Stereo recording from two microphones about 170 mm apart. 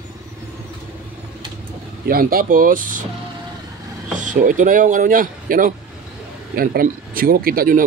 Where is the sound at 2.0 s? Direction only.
60° right (ahead or behind).